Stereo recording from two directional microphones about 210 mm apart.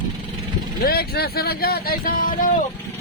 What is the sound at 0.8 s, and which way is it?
Speech, 45° left (ahead or behind).